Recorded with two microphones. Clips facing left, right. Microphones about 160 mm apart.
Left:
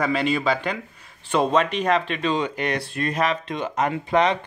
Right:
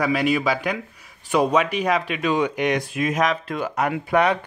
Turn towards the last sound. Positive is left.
turn(degrees=-10)  # may be behind; listen again after turning